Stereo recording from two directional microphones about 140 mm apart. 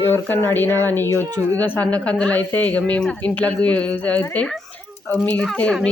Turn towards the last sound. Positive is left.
turn(degrees=5)  # may be behind; listen again after turning